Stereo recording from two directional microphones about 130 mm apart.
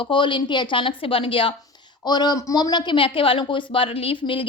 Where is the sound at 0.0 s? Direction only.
40° left (ahead or behind).